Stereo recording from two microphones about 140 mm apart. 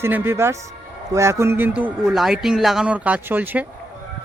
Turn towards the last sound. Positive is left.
turn(degrees=-10)  # may be behind; listen again after turning